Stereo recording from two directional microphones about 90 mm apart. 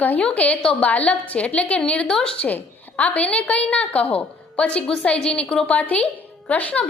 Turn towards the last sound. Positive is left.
turn(degrees=15)  # may be behind; listen again after turning